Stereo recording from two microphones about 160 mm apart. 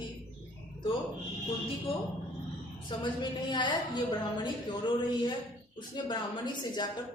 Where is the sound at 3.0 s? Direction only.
30° left (ahead or behind).